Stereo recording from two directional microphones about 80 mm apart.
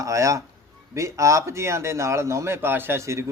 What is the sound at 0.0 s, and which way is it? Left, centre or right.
A man's voice, right.